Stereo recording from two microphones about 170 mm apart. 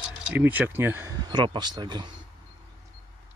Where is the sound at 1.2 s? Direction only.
25° right (ahead or behind).